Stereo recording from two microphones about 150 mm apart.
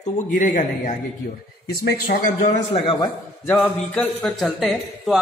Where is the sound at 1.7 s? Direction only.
90° left.